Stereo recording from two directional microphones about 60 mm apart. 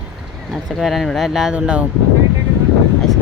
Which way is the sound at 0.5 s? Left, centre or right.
Centre.